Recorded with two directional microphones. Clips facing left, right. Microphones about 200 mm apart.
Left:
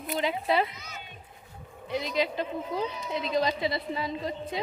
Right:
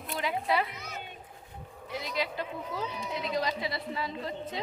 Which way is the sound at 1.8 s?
20° left (ahead or behind).